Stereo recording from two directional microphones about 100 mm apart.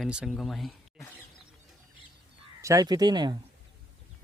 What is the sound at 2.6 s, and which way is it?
Speech, 30° right (ahead or behind).